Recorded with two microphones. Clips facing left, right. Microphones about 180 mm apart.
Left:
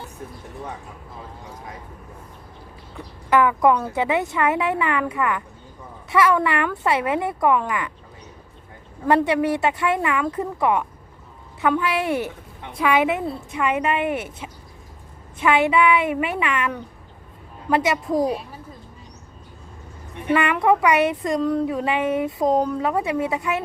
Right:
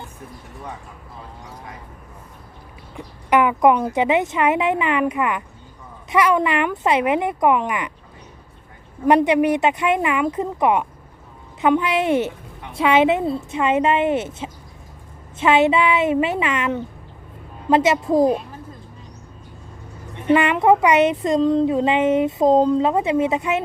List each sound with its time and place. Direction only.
2.9 s speech: 20° right (ahead or behind)
9.0 s speech: 15° right (ahead or behind)
20.2 s speech: 20° right (ahead or behind)